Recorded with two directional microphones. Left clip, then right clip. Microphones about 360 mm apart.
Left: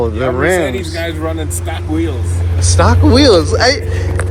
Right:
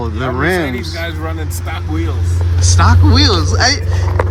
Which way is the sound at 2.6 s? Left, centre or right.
Centre.